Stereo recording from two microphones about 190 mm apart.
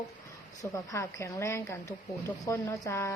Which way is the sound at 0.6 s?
15° left (ahead or behind).